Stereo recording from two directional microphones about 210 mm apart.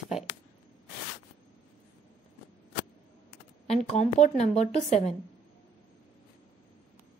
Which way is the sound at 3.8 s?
35° left (ahead or behind).